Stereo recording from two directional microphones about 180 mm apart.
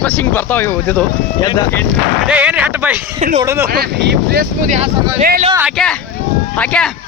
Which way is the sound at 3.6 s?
60° right (ahead or behind).